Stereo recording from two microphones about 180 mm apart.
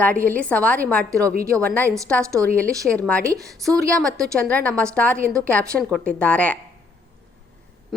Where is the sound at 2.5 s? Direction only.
10° left (ahead or behind).